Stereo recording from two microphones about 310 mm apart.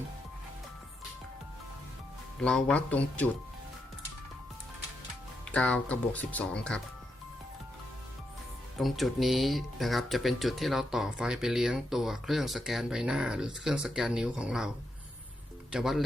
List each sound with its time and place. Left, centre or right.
2.4 s speech: centre
5.5 s speech: centre
8.8 s speech: centre
15.7 s speech: centre